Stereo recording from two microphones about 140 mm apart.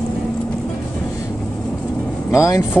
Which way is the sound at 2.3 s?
20° left (ahead or behind).